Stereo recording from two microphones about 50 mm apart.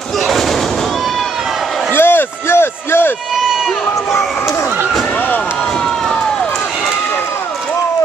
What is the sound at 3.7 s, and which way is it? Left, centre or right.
Speech, centre.